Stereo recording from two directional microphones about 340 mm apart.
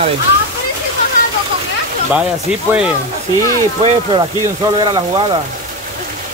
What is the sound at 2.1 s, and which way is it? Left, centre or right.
Speech, centre.